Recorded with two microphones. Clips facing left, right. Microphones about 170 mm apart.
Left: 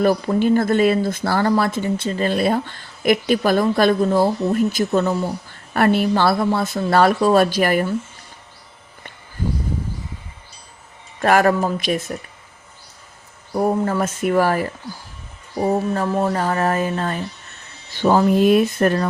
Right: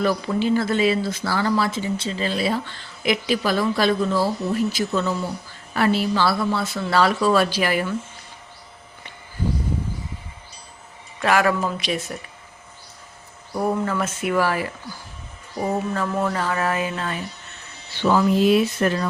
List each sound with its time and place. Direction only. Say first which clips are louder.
0.0 s speech: left 4 dB; 50° left (ahead or behind)
11.2 s speech: left 4 dB; 45° left (ahead or behind)
13.5 s speech: left 4 dB; 40° left (ahead or behind)
15.6 s a sound: left 4 dB; 40° left (ahead or behind)
16.4 s a sound: left 4 dB; 40° left (ahead or behind)
17.9 s speech: left 3 dB; 45° left (ahead or behind)